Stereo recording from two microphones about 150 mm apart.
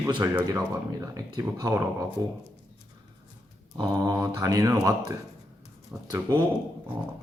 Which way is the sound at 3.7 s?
30° right (ahead or behind).